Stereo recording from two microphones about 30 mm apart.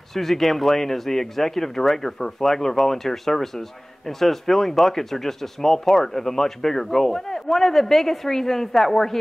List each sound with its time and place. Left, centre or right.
0.1 s speech: centre